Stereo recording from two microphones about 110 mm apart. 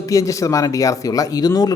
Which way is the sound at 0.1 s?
30° left (ahead or behind).